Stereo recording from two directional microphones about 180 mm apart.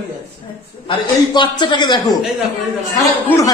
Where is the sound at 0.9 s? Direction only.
25° left (ahead or behind).